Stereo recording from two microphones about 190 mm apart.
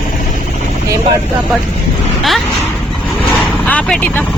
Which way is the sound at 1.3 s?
Centre (ahead or behind).